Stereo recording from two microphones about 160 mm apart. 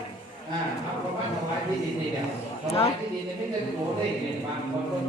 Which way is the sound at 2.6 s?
40° left (ahead or behind).